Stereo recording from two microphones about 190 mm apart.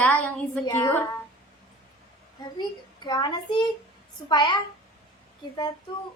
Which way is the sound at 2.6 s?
20° left (ahead or behind).